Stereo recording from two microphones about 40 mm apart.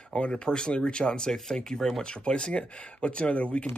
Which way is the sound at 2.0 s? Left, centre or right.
Left.